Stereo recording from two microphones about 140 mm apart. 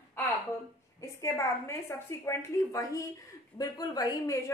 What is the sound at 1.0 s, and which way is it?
A woman's voice, 20° left (ahead or behind).